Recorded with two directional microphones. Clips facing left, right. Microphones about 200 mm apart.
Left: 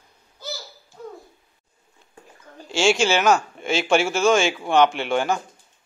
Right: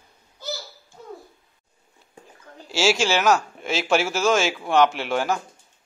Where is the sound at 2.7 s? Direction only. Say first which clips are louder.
Left 2 dB; centre (ahead or behind).